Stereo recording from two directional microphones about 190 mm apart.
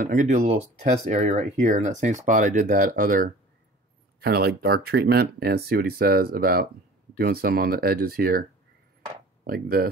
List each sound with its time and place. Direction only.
0.0 s speech: 40° right (ahead or behind)